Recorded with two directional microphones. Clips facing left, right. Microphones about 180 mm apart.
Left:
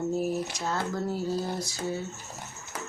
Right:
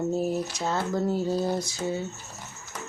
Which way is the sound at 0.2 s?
25° right (ahead or behind).